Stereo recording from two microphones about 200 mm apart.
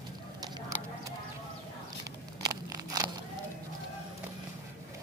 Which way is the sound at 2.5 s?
15° right (ahead or behind).